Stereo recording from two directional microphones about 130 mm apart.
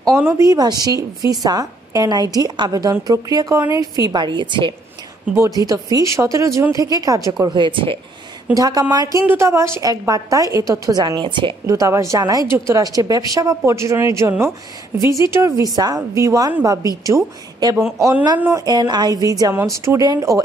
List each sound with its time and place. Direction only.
0.3 s a woman's voice: 25° right (ahead or behind)
5.6 s a woman's voice: 25° right (ahead or behind)
8.5 s a woman's voice: 30° right (ahead or behind)
9.2 s a woman's voice: 15° right (ahead or behind)